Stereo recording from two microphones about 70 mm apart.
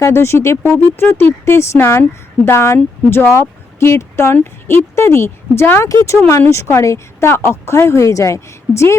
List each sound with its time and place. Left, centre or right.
0.0 s speech: left
6.1 s speech: left